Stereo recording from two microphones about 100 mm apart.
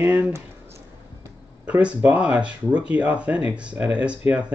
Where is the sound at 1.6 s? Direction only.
15° right (ahead or behind).